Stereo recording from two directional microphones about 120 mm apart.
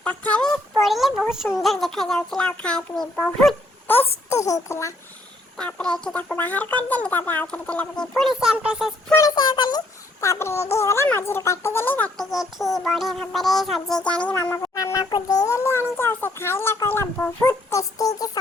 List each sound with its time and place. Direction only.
0.0 s a sound: 10° left (ahead or behind); by 1.5 s 5° right (ahead or behind)
1.6 s speech: centre (ahead or behind)
4.3 s a child's voice: 25° left (ahead or behind)
5.5 s speech: 10° left (ahead or behind); by 8.9 s 10° right (ahead or behind)
9.3 s a child's voice: 40° left (ahead or behind); by 12.1 s 15° left (ahead or behind)
12.1 s speech: centre (ahead or behind)
14.6 s a child's voice: 30° left (ahead or behind)
17.7 s a child's voice: 25° left (ahead or behind)